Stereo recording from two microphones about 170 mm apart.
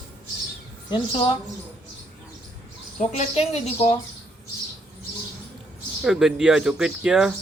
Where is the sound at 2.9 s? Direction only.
40° left (ahead or behind).